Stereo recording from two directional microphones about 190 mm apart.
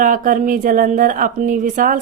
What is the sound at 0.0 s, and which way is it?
Speech, 45° right (ahead or behind).